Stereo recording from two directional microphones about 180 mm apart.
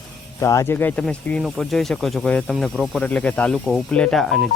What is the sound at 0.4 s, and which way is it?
Speech, 15° left (ahead or behind).